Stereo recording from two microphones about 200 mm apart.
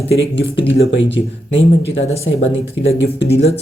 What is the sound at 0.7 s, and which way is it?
Speech, 65° left (ahead or behind).